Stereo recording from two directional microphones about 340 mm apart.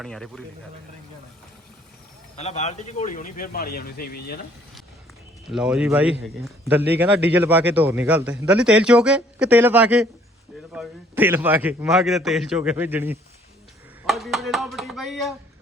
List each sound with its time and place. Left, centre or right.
0.0 s a man's voice: centre
2.3 s speech: centre
5.5 s a man's voice: centre